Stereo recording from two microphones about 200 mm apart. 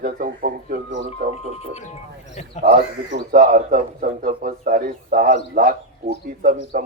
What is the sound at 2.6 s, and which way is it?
A man's voice, 40° right (ahead or behind).